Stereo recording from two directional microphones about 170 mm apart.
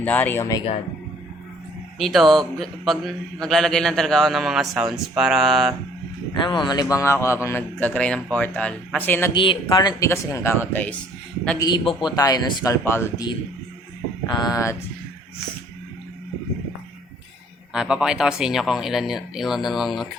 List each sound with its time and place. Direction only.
0.0 s speech: 10° left (ahead or behind)
2.0 s a man's voice: centre (ahead or behind)
6.3 s speech: 25° left (ahead or behind); by 9.3 s 10° left (ahead or behind)
9.3 s speech: 30° left (ahead or behind); by 10.9 s 10° left (ahead or behind)
11.6 s speech: 25° left (ahead or behind)
14.3 s speech: 25° left (ahead or behind)
17.7 s a man's voice: 5° right (ahead or behind)